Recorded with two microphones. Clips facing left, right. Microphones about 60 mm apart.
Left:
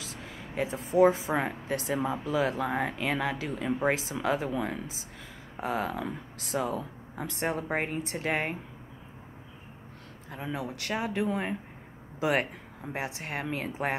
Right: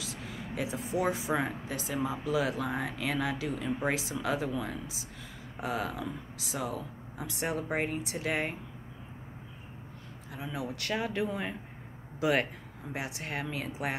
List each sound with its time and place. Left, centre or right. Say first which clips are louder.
0.0 s speech: right 1 dB; left
1.7 s speech: left 4 dB; left
2.2 s speech: left 1 dB; left
6.0 s speech: left 2 dB; left
10.3 s speech: left 3 dB; left
10.8 s speech: left 1 dB; left